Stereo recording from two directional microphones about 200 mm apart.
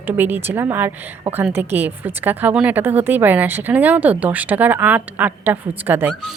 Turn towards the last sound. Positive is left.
turn(degrees=-5)  # may be behind; listen again after turning